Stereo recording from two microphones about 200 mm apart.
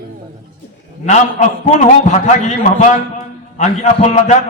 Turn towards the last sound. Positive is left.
turn(degrees=35)  # may be behind; listen again after turning